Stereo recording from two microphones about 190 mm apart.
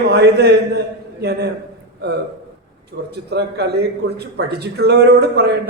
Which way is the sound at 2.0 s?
60° right (ahead or behind).